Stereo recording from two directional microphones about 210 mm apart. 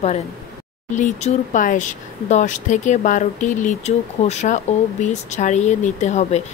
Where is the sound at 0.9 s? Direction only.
35° left (ahead or behind).